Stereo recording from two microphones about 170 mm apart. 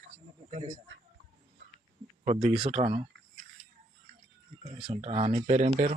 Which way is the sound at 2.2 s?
35° right (ahead or behind).